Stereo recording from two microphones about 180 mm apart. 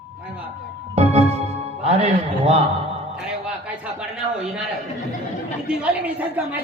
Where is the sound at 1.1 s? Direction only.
35° right (ahead or behind).